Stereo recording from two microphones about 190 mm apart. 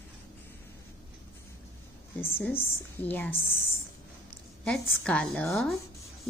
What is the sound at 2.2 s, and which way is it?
A woman's voice, 10° left (ahead or behind).